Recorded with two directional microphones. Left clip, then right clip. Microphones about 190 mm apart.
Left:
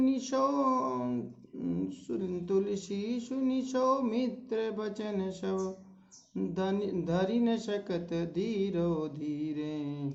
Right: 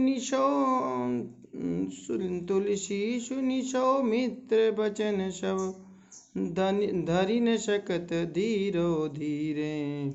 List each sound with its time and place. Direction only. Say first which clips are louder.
0.0 s speech: right 3 dB; 25° right (ahead or behind)